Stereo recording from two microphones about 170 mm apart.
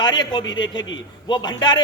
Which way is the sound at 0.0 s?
25° left (ahead or behind).